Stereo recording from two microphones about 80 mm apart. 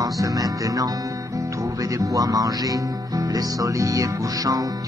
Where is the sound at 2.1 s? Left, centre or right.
Right.